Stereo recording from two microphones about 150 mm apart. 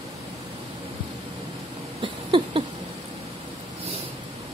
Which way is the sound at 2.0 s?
35° right (ahead or behind).